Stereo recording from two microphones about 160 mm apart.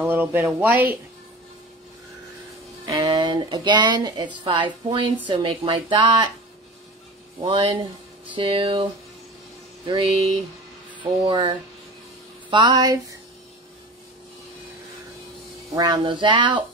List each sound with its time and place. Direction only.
0.0 s speech: 10° right (ahead or behind)
2.8 s a woman's voice: 25° right (ahead or behind)
7.4 s speech: 30° right (ahead or behind)
9.8 s a woman's voice: 30° right (ahead or behind)
15.7 s speech: 25° right (ahead or behind)